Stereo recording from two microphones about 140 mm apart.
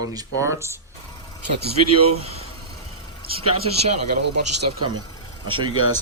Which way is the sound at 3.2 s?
90° right.